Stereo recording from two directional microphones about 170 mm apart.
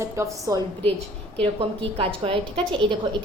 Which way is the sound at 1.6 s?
30° right (ahead or behind).